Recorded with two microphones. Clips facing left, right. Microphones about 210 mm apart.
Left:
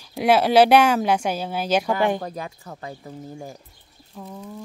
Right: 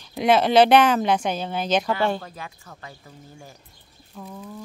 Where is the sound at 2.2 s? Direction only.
40° left (ahead or behind).